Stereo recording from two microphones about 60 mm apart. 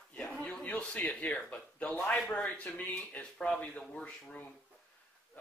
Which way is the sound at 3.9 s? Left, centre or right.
Centre.